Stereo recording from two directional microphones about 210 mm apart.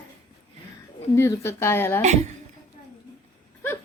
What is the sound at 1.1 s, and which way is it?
Speech, 15° left (ahead or behind).